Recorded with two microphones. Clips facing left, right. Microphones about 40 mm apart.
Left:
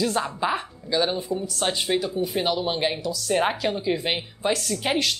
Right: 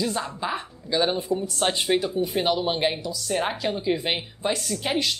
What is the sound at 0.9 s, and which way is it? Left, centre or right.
A woman's voice, centre.